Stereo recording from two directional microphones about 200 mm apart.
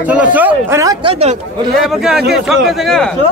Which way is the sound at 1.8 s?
Centre (ahead or behind).